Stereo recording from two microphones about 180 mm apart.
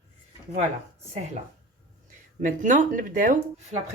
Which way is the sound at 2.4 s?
45° right (ahead or behind).